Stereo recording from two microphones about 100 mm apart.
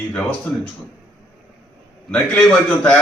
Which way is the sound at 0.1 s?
15° left (ahead or behind).